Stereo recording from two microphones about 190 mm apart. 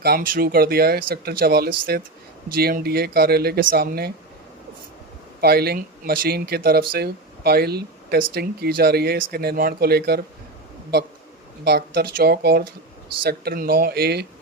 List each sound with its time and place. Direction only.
0.0 s speech: 50° right (ahead or behind)
5.4 s speech: 55° right (ahead or behind)
11.6 s speech: 55° right (ahead or behind)